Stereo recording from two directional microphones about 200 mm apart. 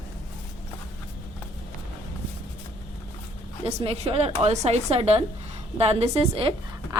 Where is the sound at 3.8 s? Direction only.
30° right (ahead or behind).